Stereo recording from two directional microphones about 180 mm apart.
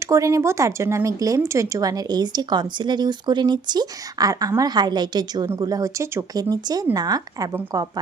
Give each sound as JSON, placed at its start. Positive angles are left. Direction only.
{"t": 0.0, "sound": "speech", "side_deg": -15}